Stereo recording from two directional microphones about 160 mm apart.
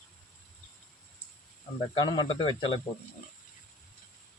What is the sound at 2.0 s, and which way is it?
Speech, 30° left (ahead or behind).